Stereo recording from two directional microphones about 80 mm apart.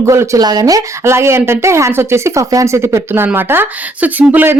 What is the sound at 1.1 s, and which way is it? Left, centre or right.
Speech, right.